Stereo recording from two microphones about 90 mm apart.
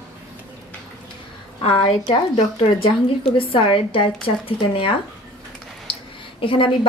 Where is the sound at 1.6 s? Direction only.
85° left.